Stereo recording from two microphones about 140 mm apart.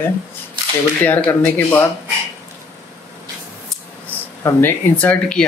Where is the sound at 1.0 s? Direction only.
15° left (ahead or behind).